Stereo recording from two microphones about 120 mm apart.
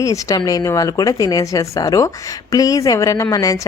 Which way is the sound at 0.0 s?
30° left (ahead or behind).